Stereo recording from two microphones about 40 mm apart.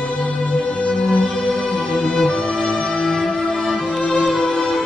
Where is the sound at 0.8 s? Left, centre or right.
Left.